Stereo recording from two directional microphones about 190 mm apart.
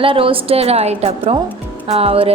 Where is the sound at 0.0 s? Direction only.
30° right (ahead or behind).